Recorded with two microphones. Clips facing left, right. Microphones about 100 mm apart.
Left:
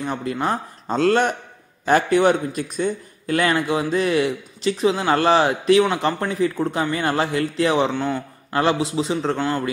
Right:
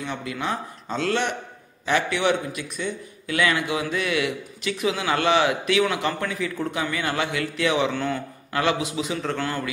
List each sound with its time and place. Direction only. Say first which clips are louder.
0.0 s a man's voice: left 5 dB; 40° left (ahead or behind)
7.9 s a man's voice: left 3 dB; 20° left (ahead or behind)
8.5 s a man's voice: left 4 dB; 35° left (ahead or behind)